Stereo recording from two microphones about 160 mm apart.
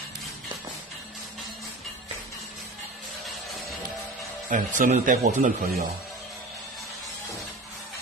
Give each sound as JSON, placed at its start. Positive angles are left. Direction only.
{"t": 4.5, "sound": "speech", "side_deg": -55}